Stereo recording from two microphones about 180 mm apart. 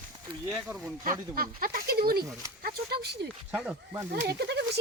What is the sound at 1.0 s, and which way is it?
Speech, 50° right (ahead or behind).